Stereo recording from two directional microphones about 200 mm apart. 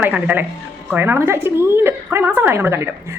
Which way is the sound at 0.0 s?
10° right (ahead or behind).